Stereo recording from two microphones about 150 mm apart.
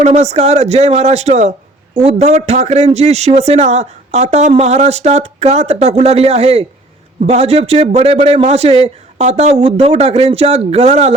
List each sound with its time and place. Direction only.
0.0 s a man's voice: 45° right (ahead or behind)